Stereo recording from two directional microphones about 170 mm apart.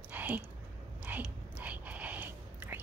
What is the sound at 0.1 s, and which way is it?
Whispering, 10° right (ahead or behind).